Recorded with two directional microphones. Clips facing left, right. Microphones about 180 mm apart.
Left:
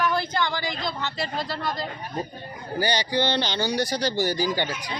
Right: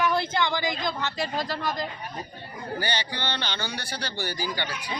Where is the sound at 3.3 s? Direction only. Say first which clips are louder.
Left 8 dB; 40° left (ahead or behind).